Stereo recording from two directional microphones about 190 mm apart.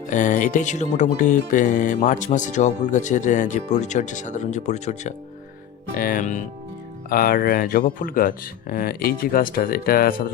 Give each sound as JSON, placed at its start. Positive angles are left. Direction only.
{"t": 0.1, "sound": "speech", "side_deg": 40}